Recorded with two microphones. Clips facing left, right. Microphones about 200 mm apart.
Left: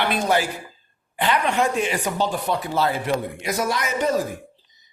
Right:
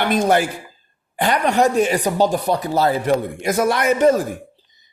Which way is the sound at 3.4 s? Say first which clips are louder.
Right 7 dB; 55° right (ahead or behind).